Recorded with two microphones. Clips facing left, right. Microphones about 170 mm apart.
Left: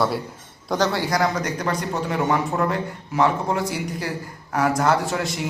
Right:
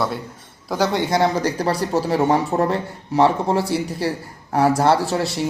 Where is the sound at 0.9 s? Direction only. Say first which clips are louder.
Right 3 dB; 25° right (ahead or behind).